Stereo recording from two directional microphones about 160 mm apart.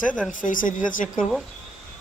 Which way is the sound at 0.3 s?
55° left (ahead or behind).